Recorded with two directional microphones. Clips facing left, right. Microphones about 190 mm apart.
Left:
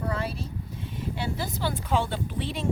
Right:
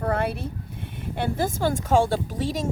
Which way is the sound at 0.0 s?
55° right (ahead or behind).